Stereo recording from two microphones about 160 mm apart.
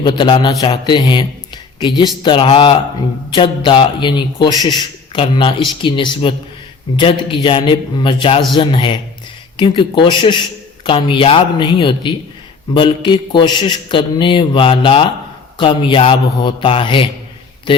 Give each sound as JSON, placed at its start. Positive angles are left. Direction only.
{"t": 0.0, "sound": "a man's voice", "side_deg": 30}